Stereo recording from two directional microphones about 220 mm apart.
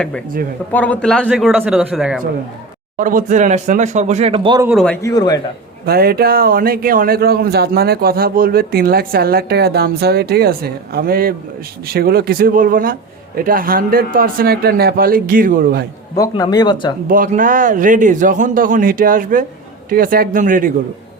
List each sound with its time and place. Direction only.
0.7 s a man's voice: 5° left (ahead or behind)
3.0 s a man's voice: 40° right (ahead or behind)
4.6 s a man's voice: centre (ahead or behind)
5.0 s speech: 15° left (ahead or behind)
5.8 s a man's voice: 45° right (ahead or behind)
16.1 s speech: 15° left (ahead or behind)
17.1 s a man's voice: 40° right (ahead or behind)